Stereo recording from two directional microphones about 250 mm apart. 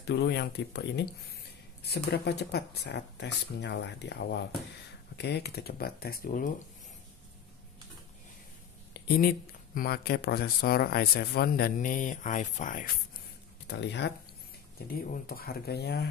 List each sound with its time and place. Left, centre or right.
0.0 s speech: left
8.9 s a sound: left
9.8 s speech: left
13.7 s speech: left